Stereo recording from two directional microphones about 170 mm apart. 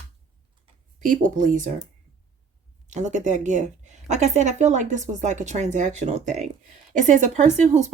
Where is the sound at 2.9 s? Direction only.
45° right (ahead or behind).